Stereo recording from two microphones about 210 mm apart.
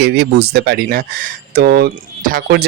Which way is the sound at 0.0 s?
55° right (ahead or behind).